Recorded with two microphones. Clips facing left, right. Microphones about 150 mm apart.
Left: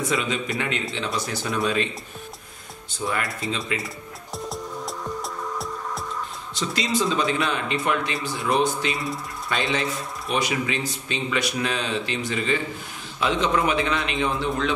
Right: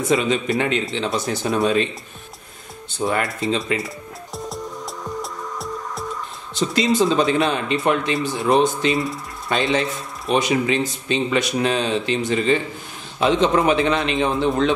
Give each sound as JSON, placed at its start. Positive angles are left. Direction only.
{"t": 0.1, "sound": "speech", "side_deg": -25}
{"t": 3.0, "sound": "speech", "side_deg": -25}
{"t": 4.5, "sound": "music", "side_deg": 0}
{"t": 6.7, "sound": "speech", "side_deg": -25}
{"t": 8.9, "sound": "speech", "side_deg": 0}
{"t": 9.5, "sound": "speech", "side_deg": -25}